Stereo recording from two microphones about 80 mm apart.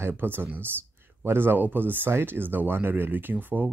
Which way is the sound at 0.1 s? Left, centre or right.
Right.